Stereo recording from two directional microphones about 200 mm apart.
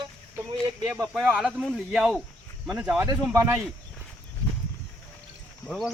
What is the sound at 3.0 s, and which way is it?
Speech, 15° right (ahead or behind).